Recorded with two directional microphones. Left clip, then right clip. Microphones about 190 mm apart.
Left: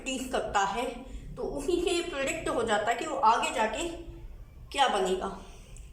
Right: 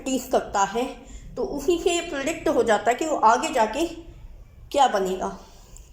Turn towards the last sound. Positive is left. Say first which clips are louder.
# right 6 dB
turn(degrees=-35)  # may be behind; listen again after turning